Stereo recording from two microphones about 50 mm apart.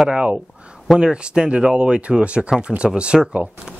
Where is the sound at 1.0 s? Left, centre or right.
Centre.